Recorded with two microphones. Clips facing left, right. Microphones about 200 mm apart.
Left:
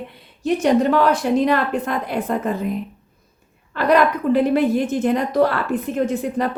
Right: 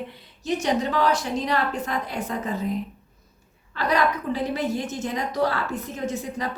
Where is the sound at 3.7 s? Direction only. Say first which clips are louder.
Left 7 dB; 55° left (ahead or behind).